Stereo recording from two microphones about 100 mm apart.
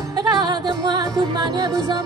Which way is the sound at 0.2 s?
45° right (ahead or behind).